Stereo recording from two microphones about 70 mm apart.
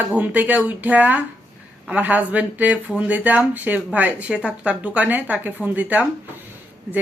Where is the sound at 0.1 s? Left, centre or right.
Right.